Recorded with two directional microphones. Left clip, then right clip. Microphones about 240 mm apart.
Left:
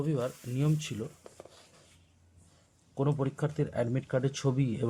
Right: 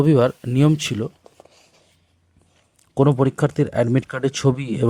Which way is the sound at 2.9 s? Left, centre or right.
Right.